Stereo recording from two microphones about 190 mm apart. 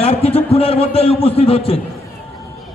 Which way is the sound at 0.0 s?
30° left (ahead or behind).